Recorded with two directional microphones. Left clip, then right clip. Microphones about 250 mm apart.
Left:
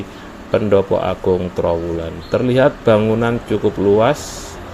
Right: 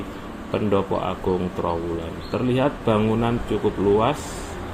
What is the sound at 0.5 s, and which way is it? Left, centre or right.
Speech, left.